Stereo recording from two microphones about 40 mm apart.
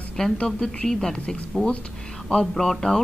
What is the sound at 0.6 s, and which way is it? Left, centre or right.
Speech, centre.